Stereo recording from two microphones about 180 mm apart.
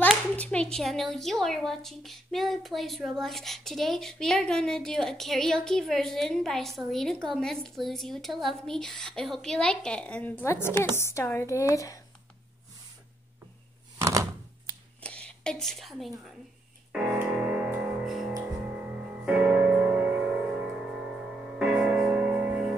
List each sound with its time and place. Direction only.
0.0 s a child's voice: 5° left (ahead or behind)
15.0 s a sound: 5° left (ahead or behind)
16.9 s music: 5° right (ahead or behind)
21.5 s music: 5° right (ahead or behind)